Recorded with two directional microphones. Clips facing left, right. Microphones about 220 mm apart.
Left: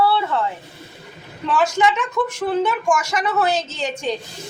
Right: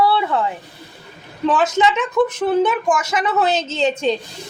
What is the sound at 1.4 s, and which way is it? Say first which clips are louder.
Speech: right 2 dB; 20° right (ahead or behind).